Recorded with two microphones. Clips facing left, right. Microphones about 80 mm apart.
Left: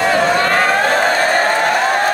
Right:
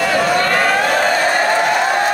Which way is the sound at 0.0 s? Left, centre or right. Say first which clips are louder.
Left 1 dB; left.